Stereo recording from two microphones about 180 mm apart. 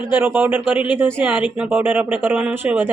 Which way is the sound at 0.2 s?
10° right (ahead or behind).